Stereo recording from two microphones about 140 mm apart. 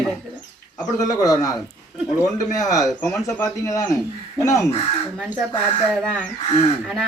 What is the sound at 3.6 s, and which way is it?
A man's voice, 25° left (ahead or behind).